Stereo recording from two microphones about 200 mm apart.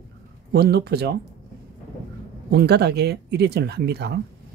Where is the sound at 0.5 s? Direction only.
55° right (ahead or behind).